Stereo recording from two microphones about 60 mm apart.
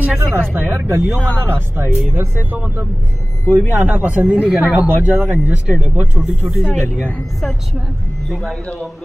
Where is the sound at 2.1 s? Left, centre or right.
Right.